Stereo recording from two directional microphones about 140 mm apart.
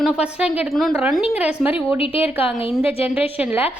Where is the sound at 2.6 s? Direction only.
45° left (ahead or behind).